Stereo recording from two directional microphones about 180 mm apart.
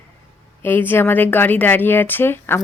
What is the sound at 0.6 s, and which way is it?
A woman's voice, 10° left (ahead or behind).